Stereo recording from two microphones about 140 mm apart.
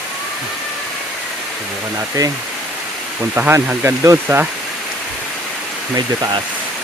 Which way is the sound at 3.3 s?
15° right (ahead or behind).